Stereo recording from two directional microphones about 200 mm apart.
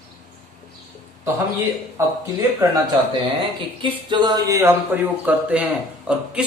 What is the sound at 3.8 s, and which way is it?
Speech, 25° right (ahead or behind).